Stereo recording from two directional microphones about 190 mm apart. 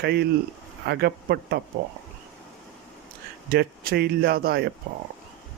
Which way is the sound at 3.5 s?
55° right (ahead or behind).